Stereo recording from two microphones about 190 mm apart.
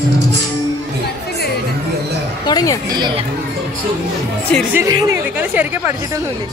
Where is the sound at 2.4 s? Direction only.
20° left (ahead or behind).